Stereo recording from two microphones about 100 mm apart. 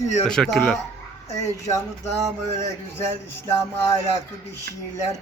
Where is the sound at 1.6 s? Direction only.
30° left (ahead or behind).